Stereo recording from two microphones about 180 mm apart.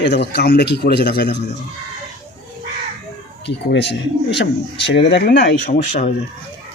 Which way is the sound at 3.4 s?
75° left (ahead or behind).